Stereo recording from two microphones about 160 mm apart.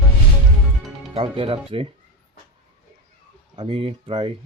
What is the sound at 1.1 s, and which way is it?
Speech, 35° right (ahead or behind).